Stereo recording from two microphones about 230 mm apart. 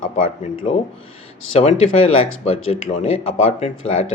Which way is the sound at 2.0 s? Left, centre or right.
Left.